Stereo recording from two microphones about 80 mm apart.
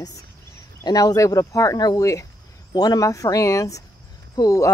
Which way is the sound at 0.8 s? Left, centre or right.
Left.